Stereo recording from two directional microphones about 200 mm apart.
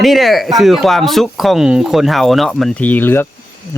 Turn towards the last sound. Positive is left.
turn(degrees=10)  # may be behind; listen again after turning